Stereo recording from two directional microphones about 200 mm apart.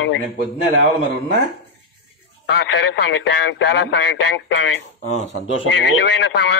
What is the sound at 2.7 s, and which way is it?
Speech, 70° left (ahead or behind).